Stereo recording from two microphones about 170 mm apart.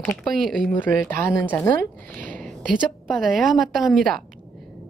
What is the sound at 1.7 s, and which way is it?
Speech, 55° right (ahead or behind).